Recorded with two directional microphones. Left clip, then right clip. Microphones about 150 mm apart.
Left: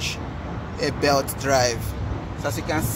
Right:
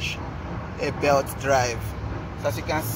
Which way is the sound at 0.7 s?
50° left (ahead or behind).